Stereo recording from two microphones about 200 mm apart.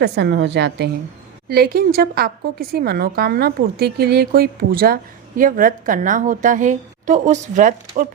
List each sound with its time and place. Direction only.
0.0 s a woman's voice: 60° right (ahead or behind); by 8.0 s 40° right (ahead or behind)